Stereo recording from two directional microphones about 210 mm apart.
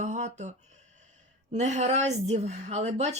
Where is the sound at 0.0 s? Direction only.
35° right (ahead or behind).